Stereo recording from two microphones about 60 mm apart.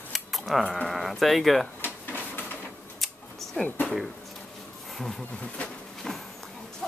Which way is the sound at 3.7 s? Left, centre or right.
Left.